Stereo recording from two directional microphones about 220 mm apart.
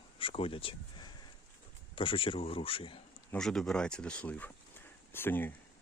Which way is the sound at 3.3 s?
Centre (ahead or behind).